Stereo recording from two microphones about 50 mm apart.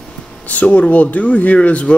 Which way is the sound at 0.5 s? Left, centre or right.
Left.